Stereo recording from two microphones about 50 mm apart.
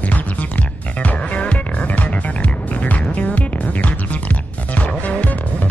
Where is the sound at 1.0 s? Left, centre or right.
Left.